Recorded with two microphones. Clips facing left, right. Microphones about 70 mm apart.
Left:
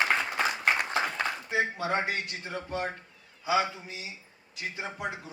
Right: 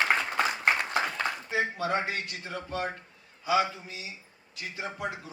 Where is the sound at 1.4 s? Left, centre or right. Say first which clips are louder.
Even; left.